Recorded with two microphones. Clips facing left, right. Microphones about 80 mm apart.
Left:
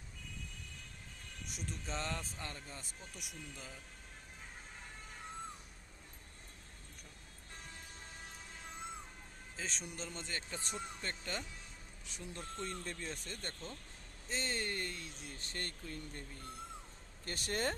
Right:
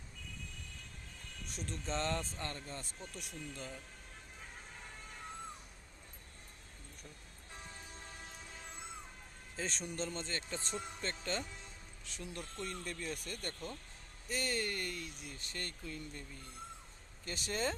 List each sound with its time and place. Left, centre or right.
1.5 s speech: centre
9.6 s speech: centre; by 16.2 s left
17.2 s speech: left